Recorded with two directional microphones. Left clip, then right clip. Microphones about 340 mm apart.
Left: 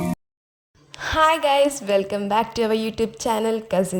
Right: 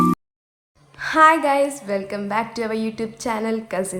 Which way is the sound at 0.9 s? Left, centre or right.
Left.